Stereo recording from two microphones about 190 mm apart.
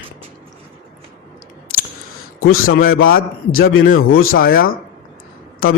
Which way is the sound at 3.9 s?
90° left.